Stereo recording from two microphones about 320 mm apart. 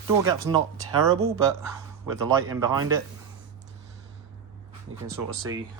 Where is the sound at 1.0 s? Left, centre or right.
Right.